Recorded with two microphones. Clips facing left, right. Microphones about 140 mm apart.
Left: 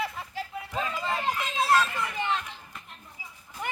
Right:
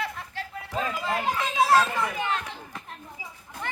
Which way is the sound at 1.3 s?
85° right.